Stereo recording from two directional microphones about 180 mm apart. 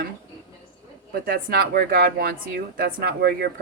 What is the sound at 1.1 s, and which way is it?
Speech, 55° right (ahead or behind).